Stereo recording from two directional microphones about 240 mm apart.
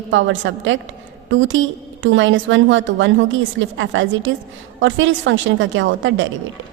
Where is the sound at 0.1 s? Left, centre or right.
Right.